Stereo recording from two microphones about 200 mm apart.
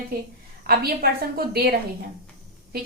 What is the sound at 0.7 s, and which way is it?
A woman's voice, 50° right (ahead or behind).